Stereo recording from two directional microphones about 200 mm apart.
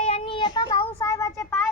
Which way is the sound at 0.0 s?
30° left (ahead or behind).